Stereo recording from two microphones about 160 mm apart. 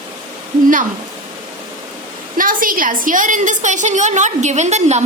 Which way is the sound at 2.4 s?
60° right (ahead or behind).